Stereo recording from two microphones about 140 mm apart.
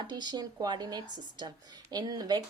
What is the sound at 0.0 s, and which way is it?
A woman's voice, 30° right (ahead or behind).